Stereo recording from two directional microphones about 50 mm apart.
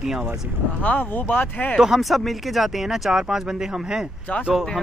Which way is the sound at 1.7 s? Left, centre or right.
Centre.